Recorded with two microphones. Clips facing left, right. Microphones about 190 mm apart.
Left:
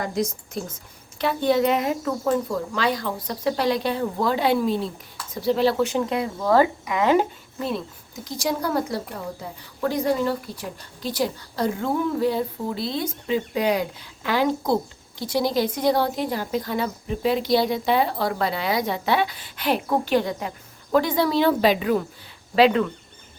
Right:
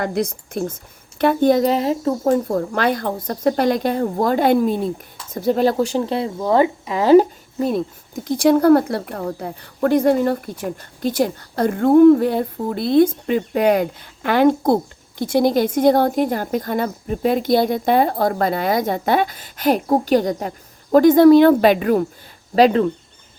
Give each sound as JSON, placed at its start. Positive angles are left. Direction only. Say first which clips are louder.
{"t": 0.0, "sound": "a woman's voice", "louder": "right 4 dB", "side_deg": -60}
{"t": 2.5, "sound": "a woman's voice", "louder": "right 5 dB", "side_deg": -55}
{"t": 22.5, "sound": "speech", "louder": "right 4 dB", "side_deg": -40}